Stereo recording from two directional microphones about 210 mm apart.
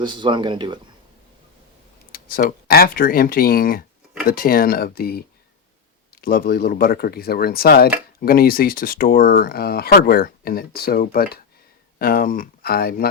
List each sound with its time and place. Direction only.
0.0 s speech: 20° right (ahead or behind)
2.1 s speech: 45° left (ahead or behind)